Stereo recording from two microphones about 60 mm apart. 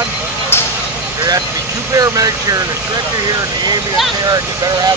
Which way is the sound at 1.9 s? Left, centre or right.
Right.